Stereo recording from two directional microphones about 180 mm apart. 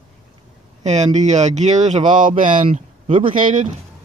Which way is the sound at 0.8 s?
40° right (ahead or behind).